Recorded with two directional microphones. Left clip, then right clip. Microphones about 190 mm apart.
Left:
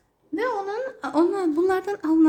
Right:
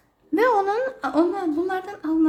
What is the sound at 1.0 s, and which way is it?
Speech, 10° left (ahead or behind).